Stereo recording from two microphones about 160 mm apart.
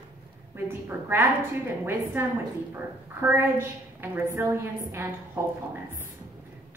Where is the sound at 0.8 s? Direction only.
15° right (ahead or behind).